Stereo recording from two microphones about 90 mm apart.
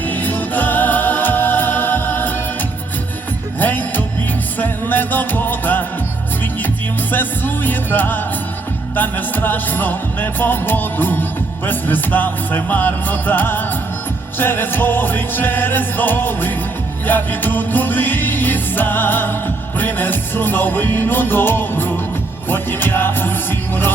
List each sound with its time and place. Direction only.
0.1 s music: 20° left (ahead or behind)
3.6 s music: 20° left (ahead or behind)
7.1 s music: 20° left (ahead or behind)